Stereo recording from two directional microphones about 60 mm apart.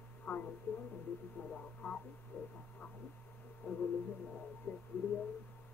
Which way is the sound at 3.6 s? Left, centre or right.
Left.